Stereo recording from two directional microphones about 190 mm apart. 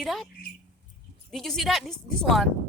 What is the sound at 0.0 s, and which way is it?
Speech, centre (ahead or behind).